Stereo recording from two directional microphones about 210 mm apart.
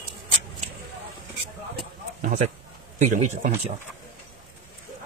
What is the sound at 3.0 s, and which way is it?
Speech, 35° right (ahead or behind).